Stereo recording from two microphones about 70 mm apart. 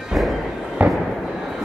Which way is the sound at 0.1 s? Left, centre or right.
Centre.